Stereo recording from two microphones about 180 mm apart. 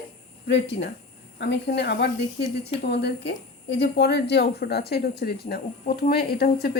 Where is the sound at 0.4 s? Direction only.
70° left (ahead or behind).